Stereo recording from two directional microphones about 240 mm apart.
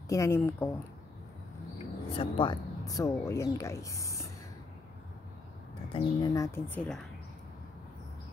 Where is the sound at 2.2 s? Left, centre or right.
Centre.